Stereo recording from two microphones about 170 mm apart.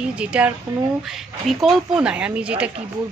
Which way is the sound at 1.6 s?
5° right (ahead or behind).